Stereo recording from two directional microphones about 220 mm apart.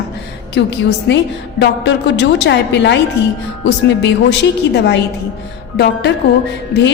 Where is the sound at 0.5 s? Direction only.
50° left (ahead or behind).